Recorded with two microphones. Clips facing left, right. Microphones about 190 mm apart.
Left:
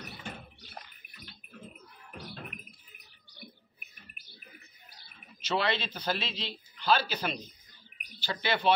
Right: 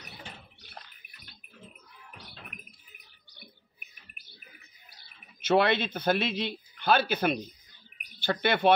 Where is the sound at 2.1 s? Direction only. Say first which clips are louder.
Left 7 dB; 50° left (ahead or behind).